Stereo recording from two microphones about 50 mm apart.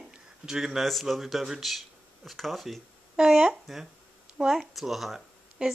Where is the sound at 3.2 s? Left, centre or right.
Centre.